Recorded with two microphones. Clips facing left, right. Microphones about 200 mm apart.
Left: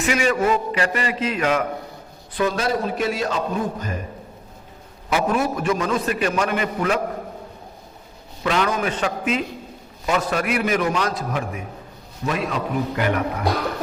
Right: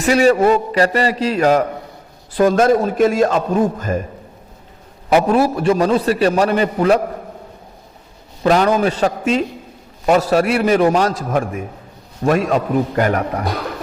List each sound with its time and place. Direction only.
0.0 s a man's voice: 35° right (ahead or behind)
5.3 s a man's voice: 35° right (ahead or behind)
8.4 s a man's voice: 40° right (ahead or behind)
11.3 s a man's voice: 50° right (ahead or behind)